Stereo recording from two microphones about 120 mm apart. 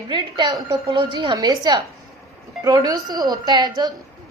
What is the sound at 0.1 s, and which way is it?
A woman's voice, 35° right (ahead or behind).